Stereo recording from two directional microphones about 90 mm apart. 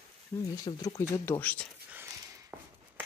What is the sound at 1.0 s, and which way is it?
Speech, 25° left (ahead or behind).